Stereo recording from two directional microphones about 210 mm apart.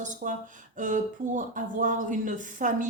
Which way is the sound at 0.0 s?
35° right (ahead or behind).